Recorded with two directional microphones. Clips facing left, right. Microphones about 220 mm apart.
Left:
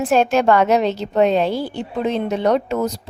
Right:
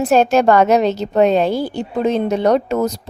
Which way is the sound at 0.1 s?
40° right (ahead or behind).